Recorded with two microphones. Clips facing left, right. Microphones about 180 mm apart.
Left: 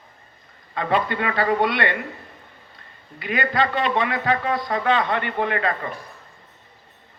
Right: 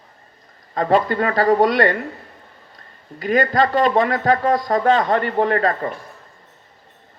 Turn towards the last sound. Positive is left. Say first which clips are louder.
# right 5 dB
turn(degrees=-40)  # may be behind; listen again after turning